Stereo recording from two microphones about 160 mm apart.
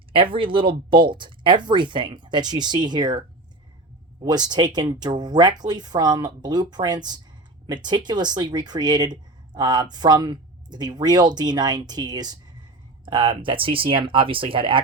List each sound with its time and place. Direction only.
0.3 s speech: 30° right (ahead or behind)